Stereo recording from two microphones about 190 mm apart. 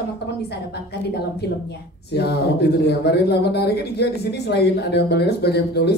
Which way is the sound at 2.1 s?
60° left (ahead or behind).